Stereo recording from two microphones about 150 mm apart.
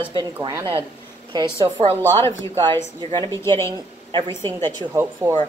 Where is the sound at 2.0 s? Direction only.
15° left (ahead or behind).